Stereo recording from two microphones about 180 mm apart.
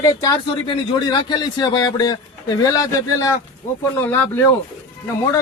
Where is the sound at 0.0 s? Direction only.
20° left (ahead or behind).